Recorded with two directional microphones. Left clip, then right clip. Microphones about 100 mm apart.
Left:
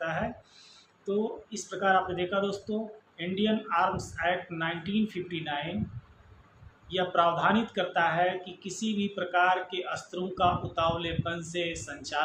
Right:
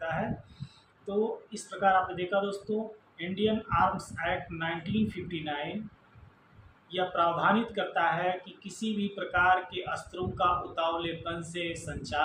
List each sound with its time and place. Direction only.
1.0 s speech: 30° left (ahead or behind)
6.9 s speech: 30° left (ahead or behind)